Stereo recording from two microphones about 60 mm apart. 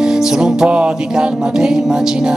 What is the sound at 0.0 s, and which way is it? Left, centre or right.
Music, centre.